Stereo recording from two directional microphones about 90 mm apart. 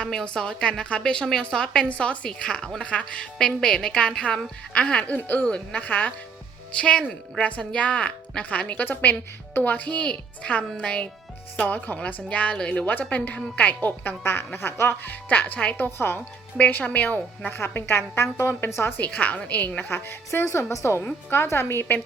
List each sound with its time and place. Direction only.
0.0 s a woman's voice: 5° left (ahead or behind); by 22.0 s 25° left (ahead or behind)